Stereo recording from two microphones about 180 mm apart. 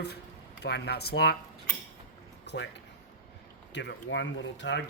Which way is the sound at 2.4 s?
75° left (ahead or behind).